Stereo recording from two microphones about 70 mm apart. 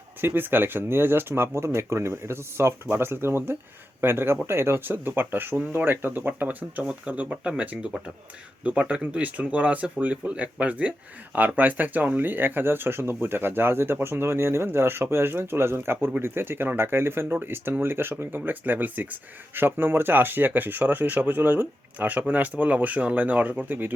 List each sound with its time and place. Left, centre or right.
0.2 s speech: right